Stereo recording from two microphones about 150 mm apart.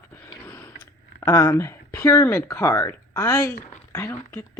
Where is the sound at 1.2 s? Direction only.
20° left (ahead or behind).